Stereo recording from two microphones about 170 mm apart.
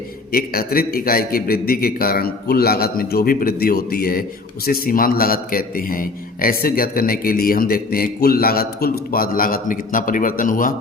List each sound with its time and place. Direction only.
0.3 s a man's voice: 60° left (ahead or behind)